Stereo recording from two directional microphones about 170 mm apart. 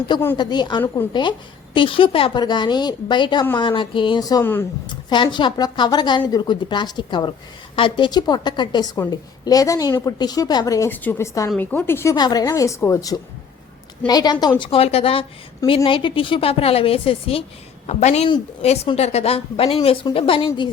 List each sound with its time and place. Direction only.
0.3 s a woman's voice: 25° left (ahead or behind)
4.9 s a woman's voice: 25° left (ahead or behind)